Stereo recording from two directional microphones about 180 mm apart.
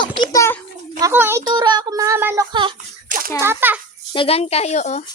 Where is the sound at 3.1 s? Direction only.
50° right (ahead or behind).